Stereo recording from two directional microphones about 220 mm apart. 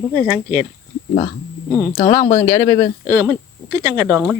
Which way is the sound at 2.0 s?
25° left (ahead or behind).